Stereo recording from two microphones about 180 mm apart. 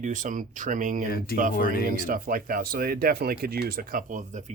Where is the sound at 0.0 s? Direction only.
45° right (ahead or behind).